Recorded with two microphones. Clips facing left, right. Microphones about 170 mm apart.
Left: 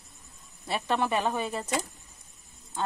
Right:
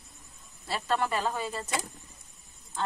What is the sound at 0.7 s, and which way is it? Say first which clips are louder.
Speech: left 2 dB; 20° left (ahead or behind).